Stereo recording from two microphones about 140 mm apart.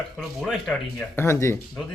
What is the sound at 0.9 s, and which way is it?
Speech, 15° left (ahead or behind).